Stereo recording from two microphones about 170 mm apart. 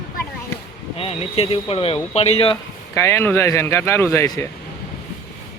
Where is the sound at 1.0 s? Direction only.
35° left (ahead or behind).